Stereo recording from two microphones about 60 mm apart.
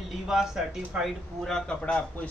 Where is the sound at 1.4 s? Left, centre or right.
Centre.